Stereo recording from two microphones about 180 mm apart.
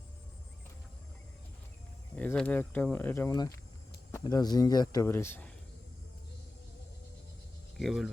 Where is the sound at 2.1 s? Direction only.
10° left (ahead or behind).